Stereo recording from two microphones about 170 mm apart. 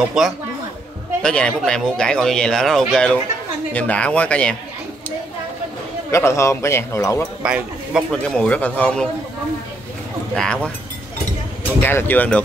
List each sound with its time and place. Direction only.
0.2 s a man's voice: centre (ahead or behind)
6.1 s a man's voice: 15° left (ahead or behind)
7.4 s speech: 5° right (ahead or behind)
8.1 s a man's voice: 5° left (ahead or behind)
10.3 s speech: 5° left (ahead or behind)
11.8 s a man's voice: 10° left (ahead or behind)